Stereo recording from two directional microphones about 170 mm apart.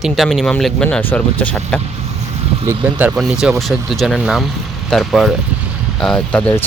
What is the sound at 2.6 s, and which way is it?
Speech, 15° right (ahead or behind).